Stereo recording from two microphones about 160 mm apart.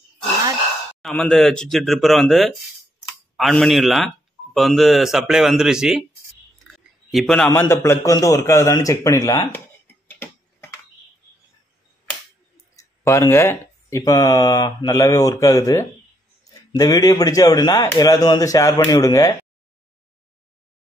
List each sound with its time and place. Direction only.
1.0 s speech: 5° left (ahead or behind)
6.6 s a sound: centre (ahead or behind)
7.4 s speech: 15° left (ahead or behind)
10.0 s tick-tock: 10° left (ahead or behind)
12.7 s speech: 20° left (ahead or behind)